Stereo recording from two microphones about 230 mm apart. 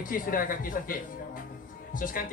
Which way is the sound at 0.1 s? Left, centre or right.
Left.